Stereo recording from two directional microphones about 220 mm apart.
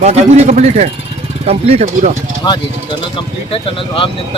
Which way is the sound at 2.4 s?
20° left (ahead or behind).